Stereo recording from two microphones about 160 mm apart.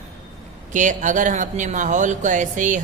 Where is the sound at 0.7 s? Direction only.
50° right (ahead or behind).